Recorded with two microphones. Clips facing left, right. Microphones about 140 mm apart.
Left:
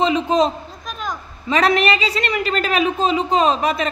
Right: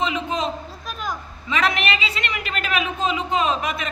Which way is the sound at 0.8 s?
5° right (ahead or behind).